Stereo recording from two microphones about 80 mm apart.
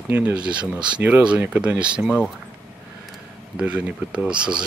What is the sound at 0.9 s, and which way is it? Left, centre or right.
Speech, centre.